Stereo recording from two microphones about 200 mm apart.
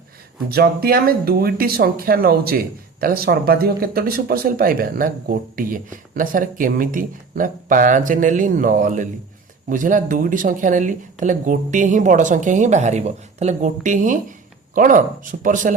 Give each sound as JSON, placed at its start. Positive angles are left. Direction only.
{"t": 0.5, "sound": "speech", "side_deg": -50}